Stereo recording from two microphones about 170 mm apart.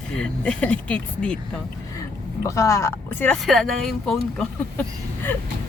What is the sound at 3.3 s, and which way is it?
Speech, centre (ahead or behind).